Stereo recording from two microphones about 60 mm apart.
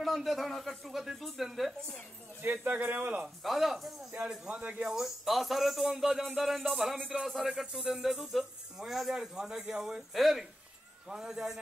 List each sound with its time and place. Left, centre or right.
0.0 s speech: centre
2.4 s speech: right
3.4 s speech: centre
4.5 s speech: right
4.8 s a man's voice: centre